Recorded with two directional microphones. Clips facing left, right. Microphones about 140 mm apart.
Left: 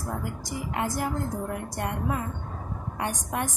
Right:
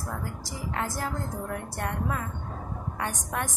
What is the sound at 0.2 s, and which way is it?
A woman's voice, 15° left (ahead or behind).